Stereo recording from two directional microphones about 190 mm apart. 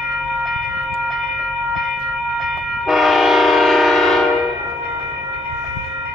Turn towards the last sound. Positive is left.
turn(degrees=0)  # may be behind; listen again after turning